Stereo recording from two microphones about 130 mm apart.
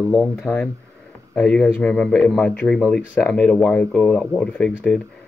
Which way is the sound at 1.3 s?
10° left (ahead or behind).